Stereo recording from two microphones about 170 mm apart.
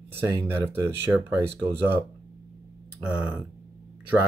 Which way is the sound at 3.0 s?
5° right (ahead or behind).